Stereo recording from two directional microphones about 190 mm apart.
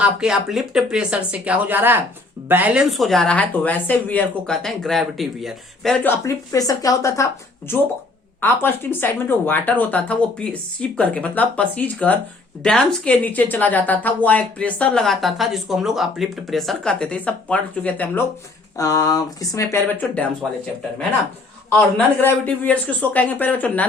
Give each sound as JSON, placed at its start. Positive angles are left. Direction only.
{"t": 0.0, "sound": "speech", "side_deg": -5}
{"t": 8.4, "sound": "speech", "side_deg": 10}
{"t": 18.8, "sound": "speech", "side_deg": 20}
{"t": 21.7, "sound": "speech", "side_deg": 10}